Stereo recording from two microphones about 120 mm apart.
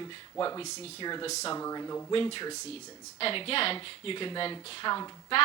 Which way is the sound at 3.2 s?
50° left (ahead or behind).